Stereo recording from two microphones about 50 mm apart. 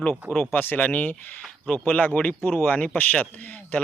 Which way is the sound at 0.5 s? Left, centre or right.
Left.